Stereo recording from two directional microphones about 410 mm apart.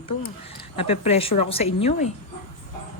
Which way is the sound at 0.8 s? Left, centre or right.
Centre.